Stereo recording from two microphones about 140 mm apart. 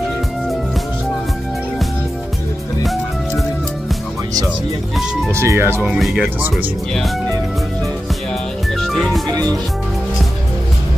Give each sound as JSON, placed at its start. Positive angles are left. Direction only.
{"t": 5.3, "sound": "speech", "side_deg": -20}
{"t": 5.8, "sound": "speech", "side_deg": 0}
{"t": 8.7, "sound": "music", "side_deg": 0}